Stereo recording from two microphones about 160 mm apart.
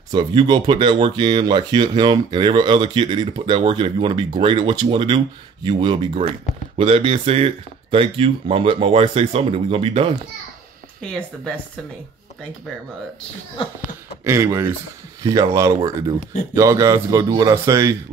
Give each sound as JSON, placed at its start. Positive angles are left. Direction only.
{"t": 0.1, "sound": "speech", "side_deg": -30}
{"t": 11.0, "sound": "speech", "side_deg": 5}
{"t": 14.2, "sound": "speech", "side_deg": -15}